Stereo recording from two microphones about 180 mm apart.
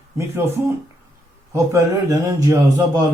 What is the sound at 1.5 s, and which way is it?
Speech, 15° right (ahead or behind).